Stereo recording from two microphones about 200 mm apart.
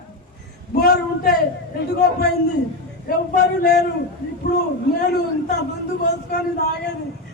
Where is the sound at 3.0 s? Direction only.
50° left (ahead or behind).